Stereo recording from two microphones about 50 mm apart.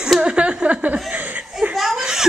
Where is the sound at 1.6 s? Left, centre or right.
Centre.